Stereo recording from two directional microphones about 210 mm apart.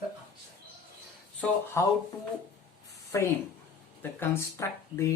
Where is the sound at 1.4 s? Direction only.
10° left (ahead or behind).